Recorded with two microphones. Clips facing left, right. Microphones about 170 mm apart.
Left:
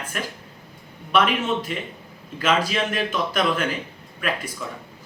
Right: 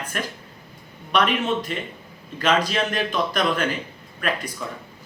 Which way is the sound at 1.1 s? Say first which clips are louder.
Left 1 dB; 5° left (ahead or behind).